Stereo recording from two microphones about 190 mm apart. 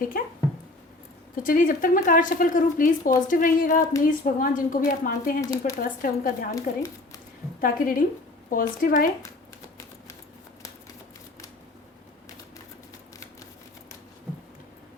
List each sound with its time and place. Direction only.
0.1 s speech: 50° left (ahead or behind)
1.4 s speech: 45° left (ahead or behind)
5.4 s speech: 15° left (ahead or behind)
5.8 s speech: 45° left (ahead or behind)
6.6 s speech: 20° left (ahead or behind)
7.6 s speech: 50° left (ahead or behind)